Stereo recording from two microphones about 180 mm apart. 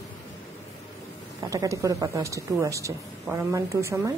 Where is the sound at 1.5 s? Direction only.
20° right (ahead or behind).